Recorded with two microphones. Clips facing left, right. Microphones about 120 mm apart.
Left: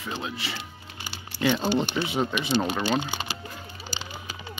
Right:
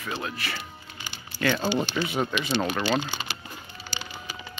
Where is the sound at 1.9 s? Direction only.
20° left (ahead or behind).